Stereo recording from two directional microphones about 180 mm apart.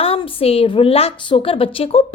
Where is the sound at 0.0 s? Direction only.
30° left (ahead or behind).